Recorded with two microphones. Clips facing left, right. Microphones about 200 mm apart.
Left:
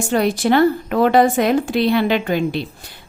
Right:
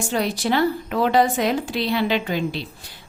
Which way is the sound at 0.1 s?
55° left (ahead or behind).